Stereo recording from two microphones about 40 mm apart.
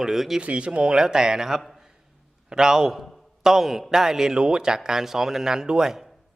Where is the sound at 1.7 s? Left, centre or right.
Centre.